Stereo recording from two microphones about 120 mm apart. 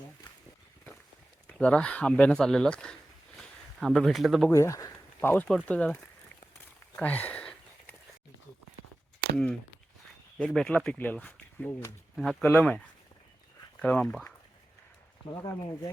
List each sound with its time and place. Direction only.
1.5 s speech: 10° left (ahead or behind)
3.3 s a sound: centre (ahead or behind)
4.5 s speech: 25° left (ahead or behind); by 6.0 s 10° left (ahead or behind)
6.9 s a sound: 15° left (ahead or behind)
10.4 s speech: 5° left (ahead or behind); by 11.9 s 20° left (ahead or behind)
12.1 s speech: centre (ahead or behind)
12.4 s speech: 15° left (ahead or behind)
13.8 s speech: 10° left (ahead or behind)
15.3 s speech: 35° left (ahead or behind)